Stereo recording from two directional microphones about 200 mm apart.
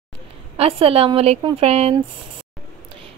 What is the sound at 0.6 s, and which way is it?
Speech, 30° right (ahead or behind).